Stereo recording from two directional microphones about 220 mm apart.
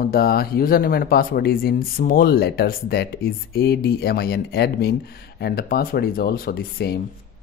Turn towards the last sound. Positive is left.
turn(degrees=45)  # may be behind; listen again after turning